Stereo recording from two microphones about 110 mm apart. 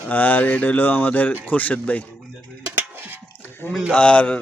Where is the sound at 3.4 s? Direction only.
20° left (ahead or behind).